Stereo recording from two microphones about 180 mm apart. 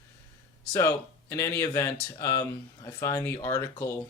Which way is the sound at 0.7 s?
15° left (ahead or behind).